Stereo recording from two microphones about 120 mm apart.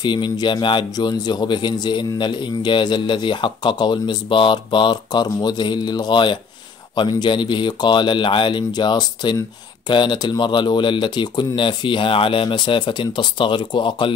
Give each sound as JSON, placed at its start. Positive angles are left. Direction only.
{"t": 0.0, "sound": "speech", "side_deg": 40}